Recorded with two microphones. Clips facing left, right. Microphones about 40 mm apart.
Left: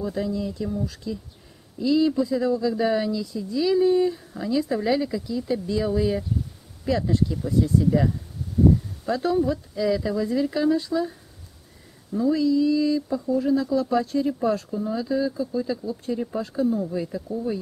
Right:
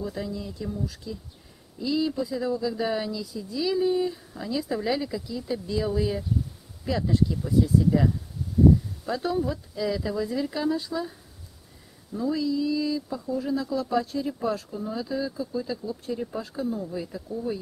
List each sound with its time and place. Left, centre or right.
0.0 s speech: centre